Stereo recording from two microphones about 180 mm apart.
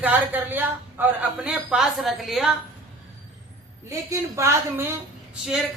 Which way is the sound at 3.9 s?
15° right (ahead or behind).